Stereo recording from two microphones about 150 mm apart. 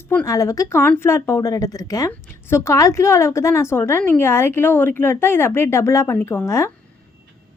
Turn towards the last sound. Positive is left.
turn(degrees=20)  # may be behind; listen again after turning